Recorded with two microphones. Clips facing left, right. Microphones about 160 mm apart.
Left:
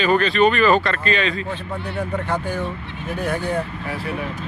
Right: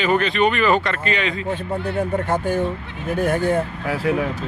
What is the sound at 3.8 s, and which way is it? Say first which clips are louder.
Speech: right 6 dB; 90° right.